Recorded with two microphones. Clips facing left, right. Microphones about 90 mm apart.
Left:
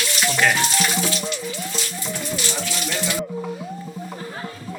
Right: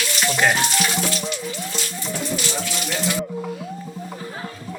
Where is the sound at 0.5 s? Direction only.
5° right (ahead or behind).